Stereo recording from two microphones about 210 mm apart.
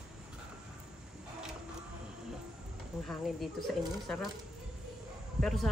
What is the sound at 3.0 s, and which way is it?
Speech, centre (ahead or behind).